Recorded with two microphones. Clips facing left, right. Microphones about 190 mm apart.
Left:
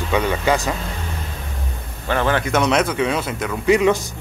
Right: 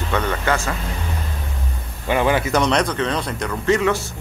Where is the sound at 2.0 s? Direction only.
10° right (ahead or behind).